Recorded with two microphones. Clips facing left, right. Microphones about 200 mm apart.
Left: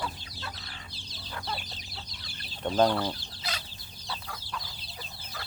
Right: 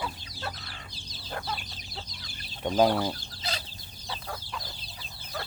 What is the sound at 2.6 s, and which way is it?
Speech, 10° right (ahead or behind).